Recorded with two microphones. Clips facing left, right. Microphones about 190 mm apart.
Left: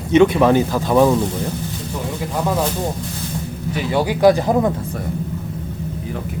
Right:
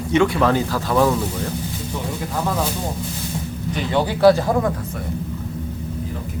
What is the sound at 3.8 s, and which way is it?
Speech, 10° left (ahead or behind).